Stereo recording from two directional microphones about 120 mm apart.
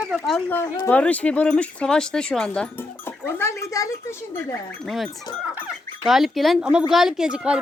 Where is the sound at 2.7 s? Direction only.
20° left (ahead or behind).